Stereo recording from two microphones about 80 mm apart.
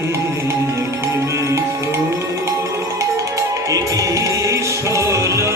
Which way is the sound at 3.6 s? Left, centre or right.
Right.